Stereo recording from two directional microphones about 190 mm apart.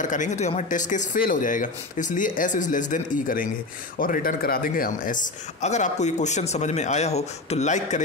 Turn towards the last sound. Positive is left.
turn(degrees=40)  # may be behind; listen again after turning